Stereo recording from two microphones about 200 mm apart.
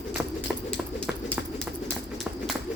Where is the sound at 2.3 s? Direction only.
5° right (ahead or behind).